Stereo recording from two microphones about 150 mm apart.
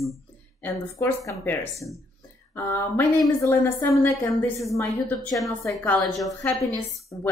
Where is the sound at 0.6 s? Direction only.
15° left (ahead or behind).